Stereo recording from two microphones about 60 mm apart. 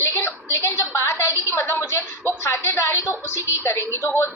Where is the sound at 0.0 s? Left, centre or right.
Left.